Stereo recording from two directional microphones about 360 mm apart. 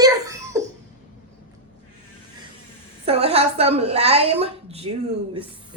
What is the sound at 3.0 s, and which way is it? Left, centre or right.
A woman's voice, centre.